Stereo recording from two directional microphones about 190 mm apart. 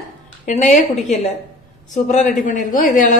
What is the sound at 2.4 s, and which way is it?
Speech, 40° left (ahead or behind).